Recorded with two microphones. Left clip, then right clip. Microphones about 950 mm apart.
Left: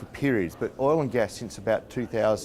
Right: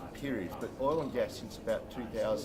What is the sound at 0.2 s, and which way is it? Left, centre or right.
Speech, left.